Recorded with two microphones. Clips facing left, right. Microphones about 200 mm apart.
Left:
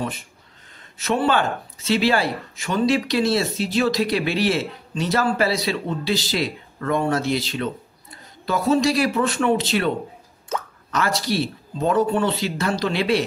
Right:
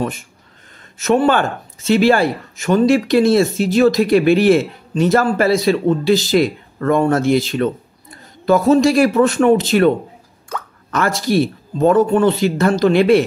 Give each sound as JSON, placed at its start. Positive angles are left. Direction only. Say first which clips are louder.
{"t": 0.9, "sound": "speech", "louder": "right 6 dB", "side_deg": -45}